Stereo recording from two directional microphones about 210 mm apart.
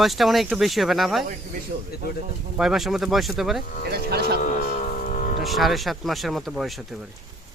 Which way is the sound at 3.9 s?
50° right (ahead or behind).